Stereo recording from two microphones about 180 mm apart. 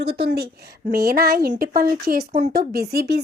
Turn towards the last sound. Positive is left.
turn(degrees=-60)  # may be behind; listen again after turning